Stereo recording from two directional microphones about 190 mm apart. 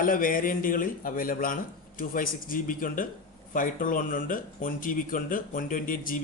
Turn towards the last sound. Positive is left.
turn(degrees=45)  # may be behind; listen again after turning